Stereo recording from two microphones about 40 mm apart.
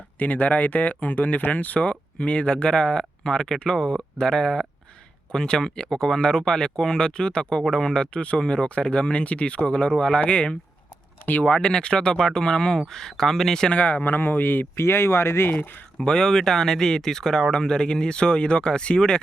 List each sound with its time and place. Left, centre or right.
0.2 s speech: left; by 13.7 s centre
13.7 s speech: left
14.0 s speech: left
16.0 s speech: centre